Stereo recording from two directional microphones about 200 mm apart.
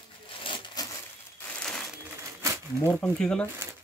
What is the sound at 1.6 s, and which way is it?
Crushing, 5° left (ahead or behind).